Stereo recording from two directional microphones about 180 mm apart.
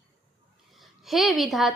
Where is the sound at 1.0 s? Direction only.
Centre (ahead or behind).